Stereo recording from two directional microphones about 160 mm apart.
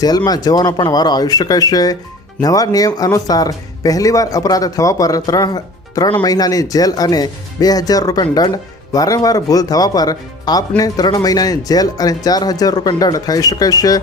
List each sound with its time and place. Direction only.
0.3 s speech: 25° left (ahead or behind)